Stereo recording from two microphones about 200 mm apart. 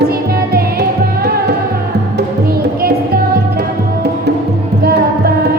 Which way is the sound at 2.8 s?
50° right (ahead or behind).